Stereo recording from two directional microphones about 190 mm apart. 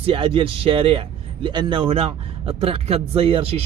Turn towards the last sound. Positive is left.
turn(degrees=-30)  # may be behind; listen again after turning